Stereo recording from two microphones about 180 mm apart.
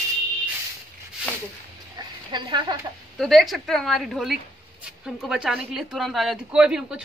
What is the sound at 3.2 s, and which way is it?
Speech, centre (ahead or behind).